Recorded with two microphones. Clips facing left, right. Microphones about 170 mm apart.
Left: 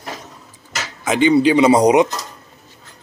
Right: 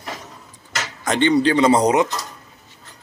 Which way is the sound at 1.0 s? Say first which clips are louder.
Left 3 dB; 5° left (ahead or behind).